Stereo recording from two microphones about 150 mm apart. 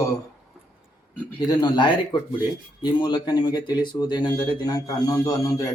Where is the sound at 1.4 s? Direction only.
30° left (ahead or behind).